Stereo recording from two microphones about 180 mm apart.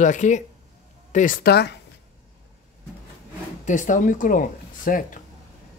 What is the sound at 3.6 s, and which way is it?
Speech, 45° left (ahead or behind).